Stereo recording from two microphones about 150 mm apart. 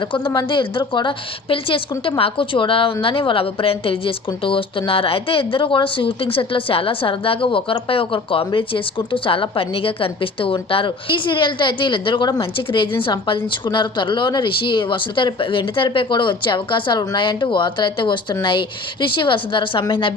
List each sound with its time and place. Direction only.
0.3 s a woman's voice: 35° left (ahead or behind)